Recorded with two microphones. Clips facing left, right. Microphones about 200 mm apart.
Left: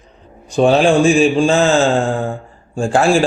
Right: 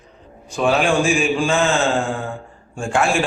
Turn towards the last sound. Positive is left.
turn(degrees=30)  # may be behind; listen again after turning